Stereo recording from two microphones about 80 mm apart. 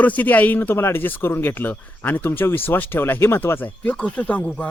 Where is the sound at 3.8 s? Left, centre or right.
Centre.